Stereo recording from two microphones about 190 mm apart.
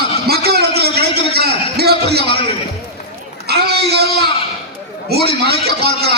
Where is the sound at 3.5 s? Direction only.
55° right (ahead or behind).